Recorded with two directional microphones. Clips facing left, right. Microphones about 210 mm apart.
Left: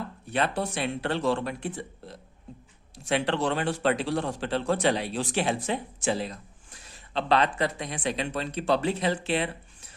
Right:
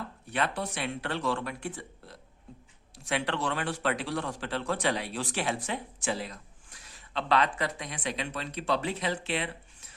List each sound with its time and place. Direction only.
0.3 s a man's voice: 30° left (ahead or behind)